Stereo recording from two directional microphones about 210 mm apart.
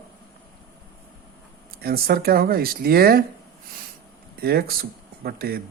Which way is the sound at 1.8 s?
45° right (ahead or behind).